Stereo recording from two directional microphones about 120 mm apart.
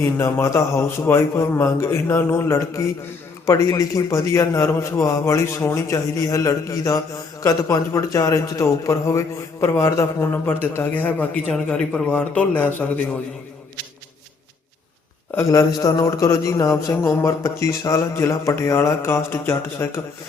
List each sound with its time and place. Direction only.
0.0 s a man's voice: 20° left (ahead or behind)
15.4 s speech: 25° left (ahead or behind)